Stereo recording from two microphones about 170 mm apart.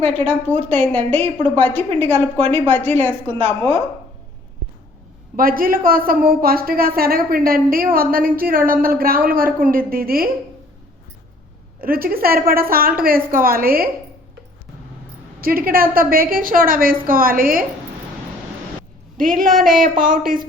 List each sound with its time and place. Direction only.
0.0 s a woman's voice: 10° left (ahead or behind)
5.4 s a woman's voice: 60° right (ahead or behind)
11.8 s a woman's voice: 60° right (ahead or behind)
15.4 s a woman's voice: 60° right (ahead or behind)
19.1 s speech: 55° right (ahead or behind)